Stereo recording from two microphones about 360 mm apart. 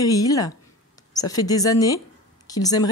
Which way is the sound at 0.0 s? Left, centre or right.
Centre.